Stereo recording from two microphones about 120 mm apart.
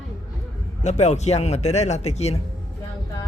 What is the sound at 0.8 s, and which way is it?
Speech, 70° left (ahead or behind).